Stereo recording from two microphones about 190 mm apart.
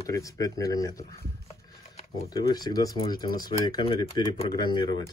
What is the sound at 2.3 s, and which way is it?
Speech, 20° left (ahead or behind).